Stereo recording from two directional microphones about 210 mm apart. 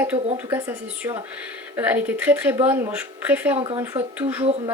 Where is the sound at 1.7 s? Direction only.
10° right (ahead or behind).